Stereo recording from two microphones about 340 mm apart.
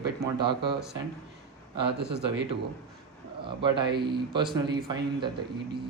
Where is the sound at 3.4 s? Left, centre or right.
Centre.